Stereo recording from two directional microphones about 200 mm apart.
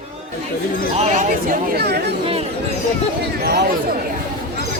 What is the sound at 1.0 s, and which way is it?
Speech, 40° right (ahead or behind).